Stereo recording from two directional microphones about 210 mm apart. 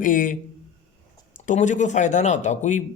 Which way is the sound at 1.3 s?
35° left (ahead or behind).